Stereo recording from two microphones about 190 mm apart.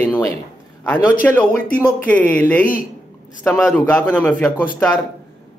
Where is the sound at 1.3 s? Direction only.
5° left (ahead or behind).